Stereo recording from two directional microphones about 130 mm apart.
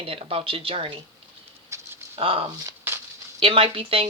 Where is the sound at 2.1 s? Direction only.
45° right (ahead or behind).